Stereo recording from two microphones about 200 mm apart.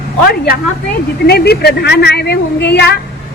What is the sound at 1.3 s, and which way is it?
A woman's voice, 55° left (ahead or behind).